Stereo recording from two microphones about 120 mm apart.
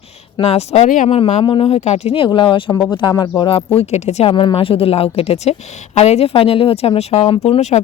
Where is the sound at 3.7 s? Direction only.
65° left (ahead or behind).